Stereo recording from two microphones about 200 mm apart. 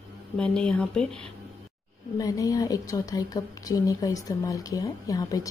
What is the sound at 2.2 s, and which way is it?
A woman's voice, 15° left (ahead or behind).